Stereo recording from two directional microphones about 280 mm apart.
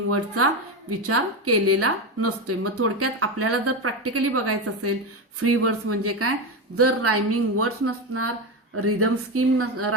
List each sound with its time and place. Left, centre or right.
0.9 s a woman's voice: right